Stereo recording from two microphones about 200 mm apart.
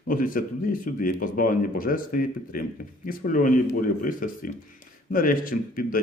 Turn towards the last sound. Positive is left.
turn(degrees=45)  # may be behind; listen again after turning